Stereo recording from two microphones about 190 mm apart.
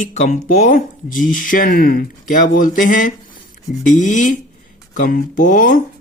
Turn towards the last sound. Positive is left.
turn(degrees=45)  # may be behind; listen again after turning